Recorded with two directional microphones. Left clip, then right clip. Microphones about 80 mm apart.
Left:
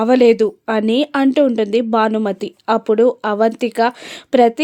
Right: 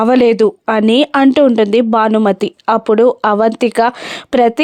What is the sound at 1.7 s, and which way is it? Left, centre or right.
Speech, right.